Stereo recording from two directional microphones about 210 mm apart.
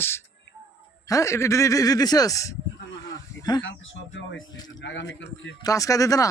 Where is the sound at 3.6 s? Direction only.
60° left (ahead or behind).